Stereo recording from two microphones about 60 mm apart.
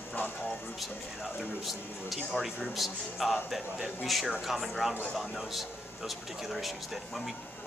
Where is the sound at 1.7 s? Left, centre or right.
Centre.